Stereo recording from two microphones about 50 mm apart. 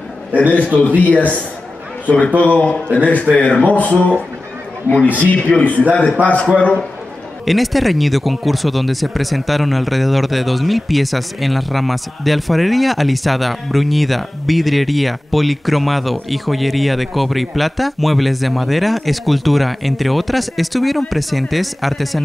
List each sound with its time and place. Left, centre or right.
0.3 s a man's voice: right
0.6 s a man's voice: centre
0.8 s speech: left
5.5 s a man's voice: centre
6.5 s speech: left
7.4 s speech: centre